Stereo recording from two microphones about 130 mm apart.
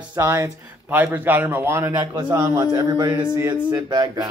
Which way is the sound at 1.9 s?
35° right (ahead or behind).